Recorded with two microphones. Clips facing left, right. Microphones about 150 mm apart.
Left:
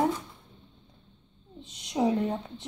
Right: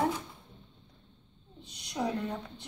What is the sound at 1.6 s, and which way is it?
A woman's voice, 25° left (ahead or behind).